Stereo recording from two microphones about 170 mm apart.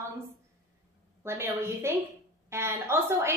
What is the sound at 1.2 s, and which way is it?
A woman's voice, 15° right (ahead or behind).